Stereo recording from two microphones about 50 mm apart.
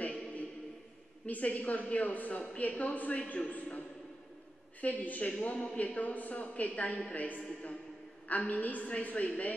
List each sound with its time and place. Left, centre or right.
1.2 s a woman's voice: left
4.8 s a woman's voice: left